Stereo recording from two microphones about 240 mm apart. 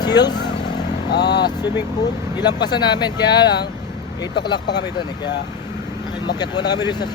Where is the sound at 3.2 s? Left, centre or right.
Left.